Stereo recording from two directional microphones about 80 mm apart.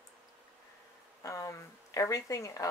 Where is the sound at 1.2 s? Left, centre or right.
Left.